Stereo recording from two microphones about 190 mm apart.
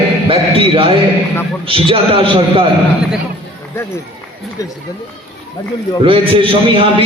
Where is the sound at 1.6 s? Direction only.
30° right (ahead or behind).